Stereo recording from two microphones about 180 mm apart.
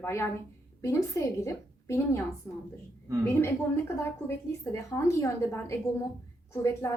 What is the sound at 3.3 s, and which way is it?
A woman's voice, 15° left (ahead or behind).